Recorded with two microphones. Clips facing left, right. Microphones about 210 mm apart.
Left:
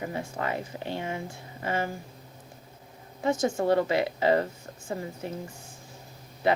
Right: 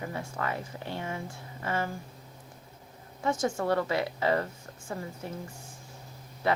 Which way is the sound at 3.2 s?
20° left (ahead or behind).